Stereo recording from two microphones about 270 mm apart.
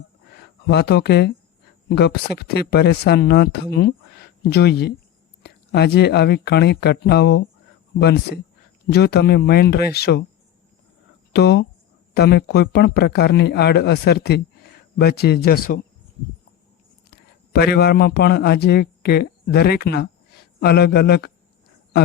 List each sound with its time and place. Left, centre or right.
0.7 s speech: left
11.3 s speech: left
17.1 s a man's voice: left